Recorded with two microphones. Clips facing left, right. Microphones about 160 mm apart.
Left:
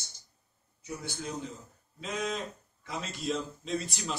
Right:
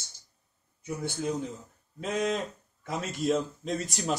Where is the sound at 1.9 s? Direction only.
55° right (ahead or behind).